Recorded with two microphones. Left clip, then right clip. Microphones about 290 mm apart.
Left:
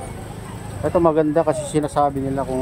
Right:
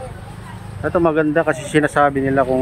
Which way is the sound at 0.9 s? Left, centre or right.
Centre.